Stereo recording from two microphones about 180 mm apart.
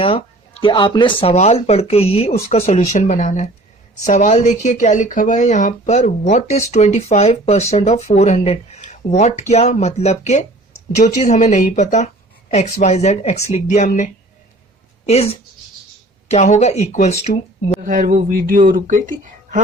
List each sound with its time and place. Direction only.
0.6 s speech: 25° left (ahead or behind)
17.8 s speech: 45° right (ahead or behind)